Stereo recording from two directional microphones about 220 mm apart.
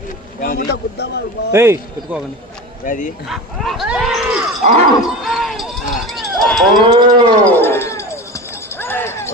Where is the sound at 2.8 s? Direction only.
35° left (ahead or behind).